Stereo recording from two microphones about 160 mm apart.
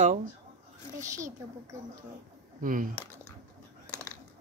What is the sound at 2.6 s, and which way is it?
Speech, 60° right (ahead or behind).